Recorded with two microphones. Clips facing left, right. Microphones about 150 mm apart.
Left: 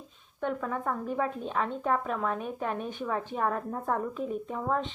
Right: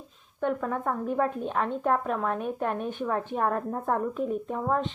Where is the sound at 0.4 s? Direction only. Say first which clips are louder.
Right 3 dB; 40° right (ahead or behind).